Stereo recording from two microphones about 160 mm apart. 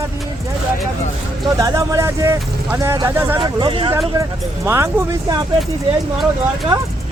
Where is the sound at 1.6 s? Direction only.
20° right (ahead or behind).